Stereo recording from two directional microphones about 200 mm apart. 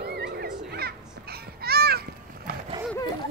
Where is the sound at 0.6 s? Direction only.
50° right (ahead or behind).